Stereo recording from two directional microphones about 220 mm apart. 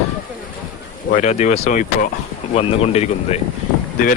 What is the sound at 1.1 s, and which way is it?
Speech, 35° left (ahead or behind).